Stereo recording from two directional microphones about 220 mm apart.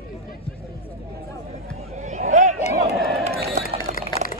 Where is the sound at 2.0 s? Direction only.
35° right (ahead or behind).